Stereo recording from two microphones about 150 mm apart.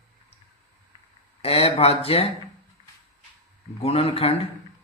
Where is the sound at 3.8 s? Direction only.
40° left (ahead or behind).